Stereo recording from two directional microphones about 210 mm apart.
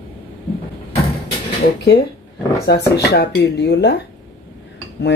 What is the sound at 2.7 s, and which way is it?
Speech, 50° left (ahead or behind).